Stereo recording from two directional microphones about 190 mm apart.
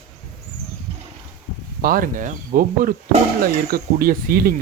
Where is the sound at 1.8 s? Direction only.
50° right (ahead or behind).